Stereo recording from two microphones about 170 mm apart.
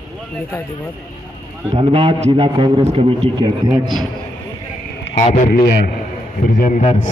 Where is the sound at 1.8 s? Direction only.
35° right (ahead or behind).